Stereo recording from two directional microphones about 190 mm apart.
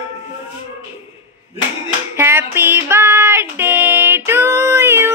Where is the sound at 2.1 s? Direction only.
10° right (ahead or behind).